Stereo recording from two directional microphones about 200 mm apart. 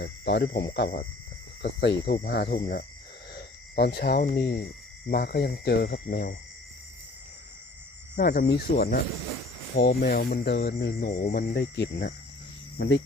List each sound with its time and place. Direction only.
0.0 s speech: 55° left (ahead or behind)
3.3 s cricket: 55° left (ahead or behind)
4.4 s speech: 55° left (ahead or behind)
8.2 s speech: 50° left (ahead or behind)